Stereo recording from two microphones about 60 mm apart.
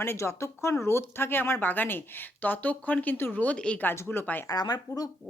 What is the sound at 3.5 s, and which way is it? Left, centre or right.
Speech, centre.